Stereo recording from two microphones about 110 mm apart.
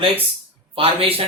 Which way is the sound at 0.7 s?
60° right (ahead or behind).